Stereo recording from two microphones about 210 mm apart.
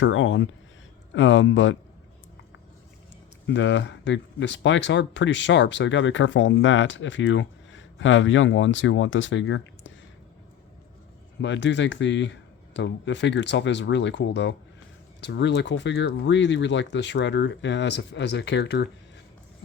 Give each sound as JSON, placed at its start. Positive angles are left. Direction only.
{"t": 0.0, "sound": "speech", "side_deg": 65}
{"t": 3.4, "sound": "speech", "side_deg": 60}
{"t": 11.3, "sound": "speech", "side_deg": 60}